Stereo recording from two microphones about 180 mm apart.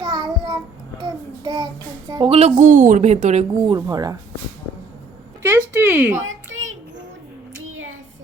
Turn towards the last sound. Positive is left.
turn(degrees=-90)